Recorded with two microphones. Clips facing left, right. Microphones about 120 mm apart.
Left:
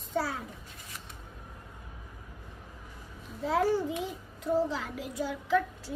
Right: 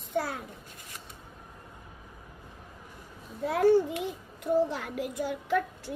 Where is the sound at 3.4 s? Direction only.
60° right (ahead or behind).